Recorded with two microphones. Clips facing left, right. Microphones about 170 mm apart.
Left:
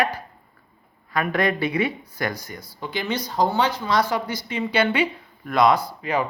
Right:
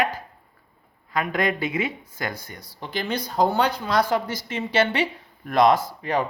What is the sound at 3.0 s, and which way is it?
Speech, 55° right (ahead or behind).